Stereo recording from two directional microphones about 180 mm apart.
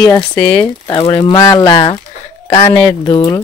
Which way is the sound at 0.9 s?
20° left (ahead or behind).